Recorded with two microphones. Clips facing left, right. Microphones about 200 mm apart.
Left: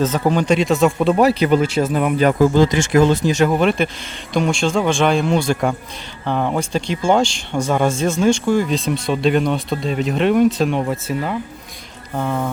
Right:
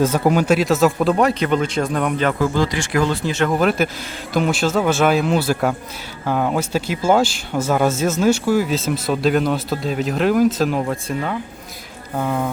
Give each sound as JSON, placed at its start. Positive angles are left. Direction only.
{"t": 0.0, "sound": "speech", "side_deg": -10}
{"t": 2.4, "sound": "speech", "side_deg": 20}
{"t": 3.5, "sound": "speech", "side_deg": 0}